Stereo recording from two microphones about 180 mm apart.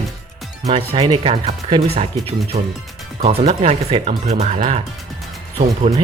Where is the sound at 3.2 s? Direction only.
35° right (ahead or behind).